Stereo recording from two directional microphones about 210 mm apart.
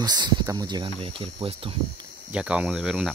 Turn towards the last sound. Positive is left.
turn(degrees=0)  # may be behind; listen again after turning